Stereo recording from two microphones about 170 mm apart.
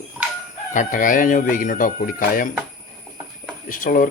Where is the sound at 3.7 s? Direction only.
50° left (ahead or behind).